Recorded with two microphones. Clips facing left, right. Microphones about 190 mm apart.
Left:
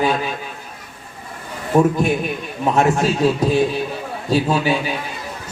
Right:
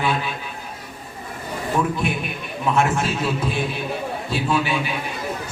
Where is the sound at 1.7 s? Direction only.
40° left (ahead or behind).